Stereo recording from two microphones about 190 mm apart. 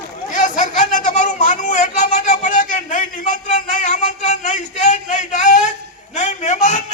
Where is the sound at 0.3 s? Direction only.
40° left (ahead or behind).